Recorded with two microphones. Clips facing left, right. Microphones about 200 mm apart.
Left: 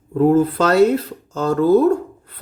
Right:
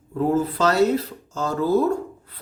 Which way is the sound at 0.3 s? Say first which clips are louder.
Left 3 dB; 60° left (ahead or behind).